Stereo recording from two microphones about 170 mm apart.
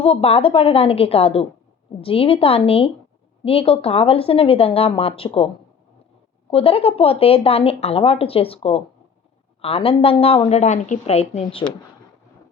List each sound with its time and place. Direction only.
0.0 s speech: 35° left (ahead or behind)
6.5 s speech: 35° left (ahead or behind)